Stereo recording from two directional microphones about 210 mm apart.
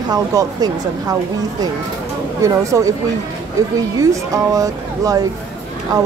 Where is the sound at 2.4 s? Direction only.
15° right (ahead or behind).